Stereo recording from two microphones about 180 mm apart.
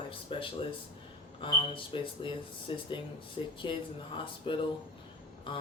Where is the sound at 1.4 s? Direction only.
30° left (ahead or behind).